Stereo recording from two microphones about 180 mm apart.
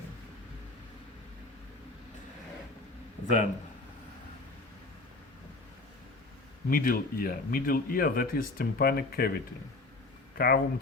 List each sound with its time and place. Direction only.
3.2 s speech: 40° left (ahead or behind)
6.7 s speech: 55° left (ahead or behind)
10.3 s speech: 60° left (ahead or behind)